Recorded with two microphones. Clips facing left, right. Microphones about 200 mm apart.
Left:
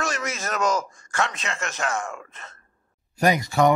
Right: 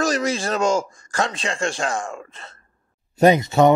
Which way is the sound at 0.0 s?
35° right (ahead or behind).